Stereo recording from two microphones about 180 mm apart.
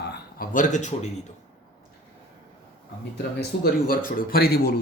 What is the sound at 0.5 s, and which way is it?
Speech, 45° left (ahead or behind).